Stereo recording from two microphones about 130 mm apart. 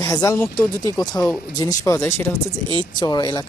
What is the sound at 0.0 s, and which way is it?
Speech, 25° left (ahead or behind).